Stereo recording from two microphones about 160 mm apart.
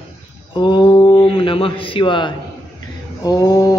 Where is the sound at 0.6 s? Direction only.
30° left (ahead or behind).